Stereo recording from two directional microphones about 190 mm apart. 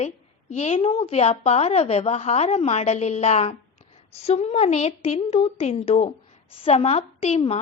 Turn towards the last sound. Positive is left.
turn(degrees=30)  # may be behind; listen again after turning